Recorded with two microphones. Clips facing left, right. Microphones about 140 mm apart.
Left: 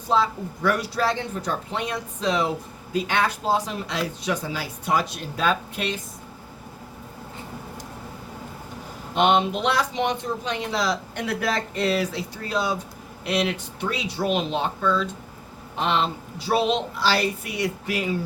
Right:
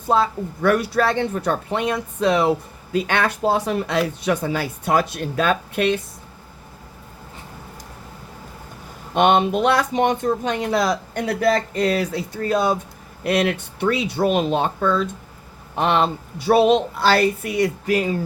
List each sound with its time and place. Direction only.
0.1 s speech: 55° right (ahead or behind)
9.1 s speech: 55° right (ahead or behind)